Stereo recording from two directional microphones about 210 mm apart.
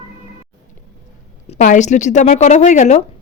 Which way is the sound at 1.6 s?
35° left (ahead or behind).